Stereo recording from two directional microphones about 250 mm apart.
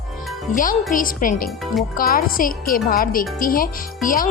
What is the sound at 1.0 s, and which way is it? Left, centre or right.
A woman's voice, left.